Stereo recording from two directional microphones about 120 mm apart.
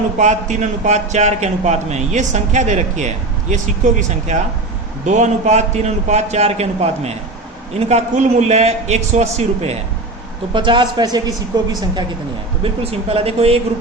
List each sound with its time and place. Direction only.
0.2 s a man's voice: 90° right
5.0 s a man's voice: 90° right; by 9.7 s 65° right (ahead or behind)
10.5 s a woman's voice: 40° right (ahead or behind)
12.6 s speech: 55° right (ahead or behind)